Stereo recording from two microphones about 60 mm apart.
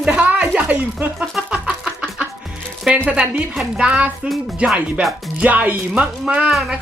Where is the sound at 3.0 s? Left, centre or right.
Right.